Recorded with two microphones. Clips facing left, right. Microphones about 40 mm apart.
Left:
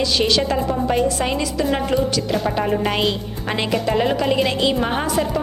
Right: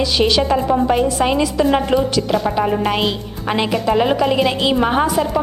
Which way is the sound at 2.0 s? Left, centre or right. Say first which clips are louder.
Right 3 dB; centre.